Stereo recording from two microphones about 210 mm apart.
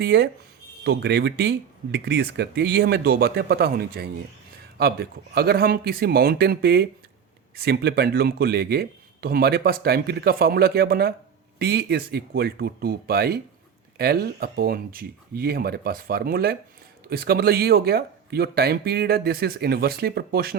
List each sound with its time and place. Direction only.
0.0 s speech: 50° right (ahead or behind)